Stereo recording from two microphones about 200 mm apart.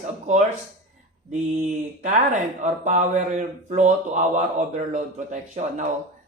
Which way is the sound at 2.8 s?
35° right (ahead or behind).